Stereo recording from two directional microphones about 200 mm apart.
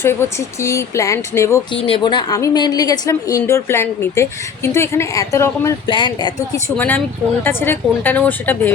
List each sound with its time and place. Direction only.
0.0 s a woman's voice: 10° left (ahead or behind)
1.7 s a woman's voice: 25° left (ahead or behind)
6.7 s a woman's voice: 5° left (ahead or behind)